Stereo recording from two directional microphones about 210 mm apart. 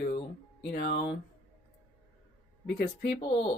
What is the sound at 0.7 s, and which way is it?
Speech, 50° left (ahead or behind).